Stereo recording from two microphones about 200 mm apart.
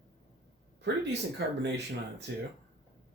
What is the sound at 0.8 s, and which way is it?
Speech, 60° right (ahead or behind).